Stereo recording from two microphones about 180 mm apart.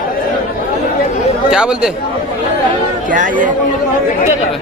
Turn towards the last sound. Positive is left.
turn(degrees=-45)  # may be behind; listen again after turning